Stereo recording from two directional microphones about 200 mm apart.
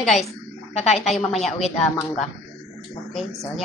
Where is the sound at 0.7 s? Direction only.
30° left (ahead or behind).